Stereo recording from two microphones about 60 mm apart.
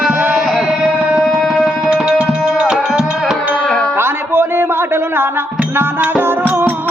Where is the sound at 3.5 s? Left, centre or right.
Centre.